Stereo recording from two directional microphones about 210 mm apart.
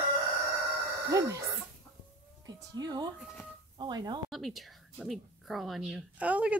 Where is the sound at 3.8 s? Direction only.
20° right (ahead or behind).